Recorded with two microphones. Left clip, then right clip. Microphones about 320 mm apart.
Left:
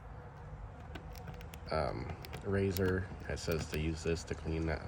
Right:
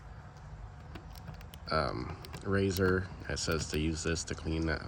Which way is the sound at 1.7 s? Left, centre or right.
Right.